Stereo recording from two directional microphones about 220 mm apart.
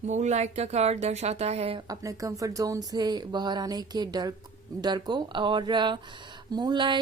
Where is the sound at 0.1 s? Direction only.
30° right (ahead or behind).